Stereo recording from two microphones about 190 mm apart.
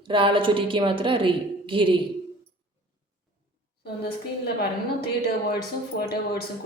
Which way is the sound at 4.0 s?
55° left (ahead or behind).